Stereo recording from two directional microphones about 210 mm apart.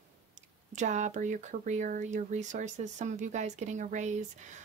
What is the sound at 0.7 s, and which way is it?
Speech, 35° right (ahead or behind).